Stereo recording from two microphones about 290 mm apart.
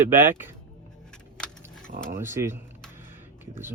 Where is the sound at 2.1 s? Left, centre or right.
Centre.